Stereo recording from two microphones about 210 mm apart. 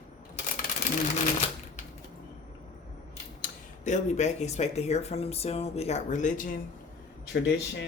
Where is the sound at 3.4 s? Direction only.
35° left (ahead or behind).